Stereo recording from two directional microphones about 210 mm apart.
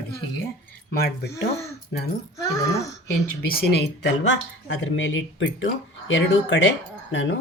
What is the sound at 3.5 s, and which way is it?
Speech, 45° left (ahead or behind).